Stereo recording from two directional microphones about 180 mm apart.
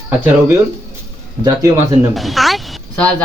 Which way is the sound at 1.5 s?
15° right (ahead or behind).